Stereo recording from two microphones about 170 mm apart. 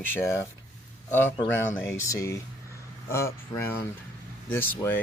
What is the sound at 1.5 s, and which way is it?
Speech, 15° left (ahead or behind).